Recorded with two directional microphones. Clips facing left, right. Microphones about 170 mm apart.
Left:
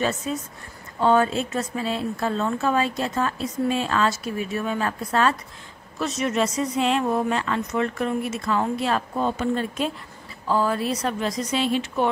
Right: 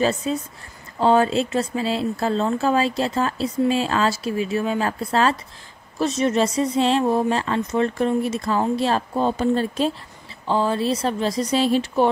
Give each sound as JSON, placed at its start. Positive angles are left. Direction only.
{"t": 0.0, "sound": "speech", "side_deg": -30}